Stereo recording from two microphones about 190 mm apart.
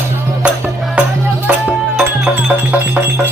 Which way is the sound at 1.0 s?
5° right (ahead or behind).